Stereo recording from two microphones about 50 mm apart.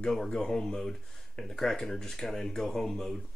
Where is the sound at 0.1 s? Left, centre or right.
Centre.